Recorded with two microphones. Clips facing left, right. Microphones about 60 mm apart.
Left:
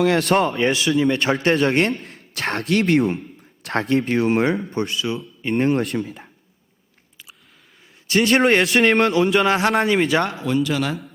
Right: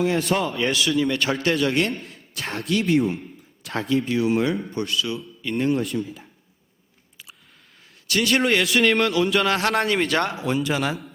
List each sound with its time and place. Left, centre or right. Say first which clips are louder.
0.0 s speech: left 5 dB; left
0.7 s speech: left 3 dB; left
1.9 s speech: left 4 dB; left
4.7 s speech: left 2 dB; left
5.7 s speech: left 3 dB; left
8.0 s a man's voice: left 4 dB; left
8.4 s speech: left 3 dB; left
9.7 s speech: left 3 dB; centre
10.4 s a man's voice: left 2 dB; centre